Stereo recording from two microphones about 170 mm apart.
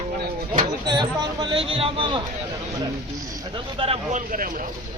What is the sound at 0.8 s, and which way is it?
Speech, 25° right (ahead or behind).